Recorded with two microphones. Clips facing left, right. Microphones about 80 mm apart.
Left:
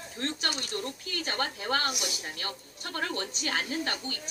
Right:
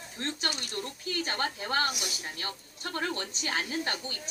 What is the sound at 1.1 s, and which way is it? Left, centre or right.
A woman's voice, right.